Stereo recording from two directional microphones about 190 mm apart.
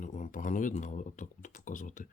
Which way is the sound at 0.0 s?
40° left (ahead or behind).